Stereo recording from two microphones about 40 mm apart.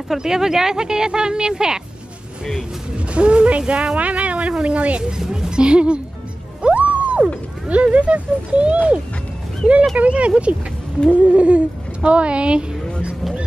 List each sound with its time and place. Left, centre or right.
0.2 s speech: centre
3.1 s a woman's voice: right
5.3 s speech: centre
6.6 s music: right
7.6 s a woman's voice: right
9.9 s a woman's voice: right